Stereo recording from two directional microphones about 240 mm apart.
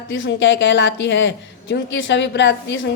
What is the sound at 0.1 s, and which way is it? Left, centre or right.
Speech, left.